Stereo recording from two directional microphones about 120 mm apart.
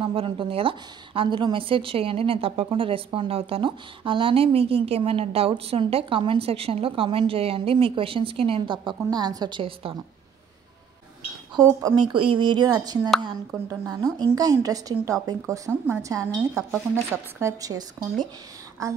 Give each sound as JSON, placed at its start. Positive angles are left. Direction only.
{"t": 0.0, "sound": "a woman's voice", "side_deg": -45}
{"t": 11.5, "sound": "a woman's voice", "side_deg": -30}
{"t": 11.9, "sound": "a woman's voice", "side_deg": -40}